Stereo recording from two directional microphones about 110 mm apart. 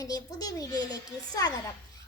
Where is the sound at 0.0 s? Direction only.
35° left (ahead or behind).